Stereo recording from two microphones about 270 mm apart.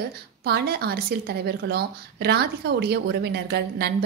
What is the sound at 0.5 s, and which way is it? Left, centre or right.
A woman's voice, right.